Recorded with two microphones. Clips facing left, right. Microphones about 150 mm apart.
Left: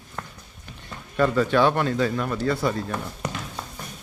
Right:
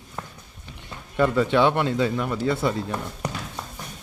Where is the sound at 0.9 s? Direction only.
15° right (ahead or behind).